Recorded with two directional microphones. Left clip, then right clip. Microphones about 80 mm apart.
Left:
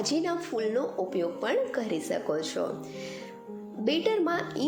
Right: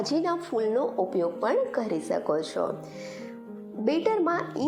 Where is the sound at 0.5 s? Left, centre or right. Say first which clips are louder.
Right 4 dB; centre.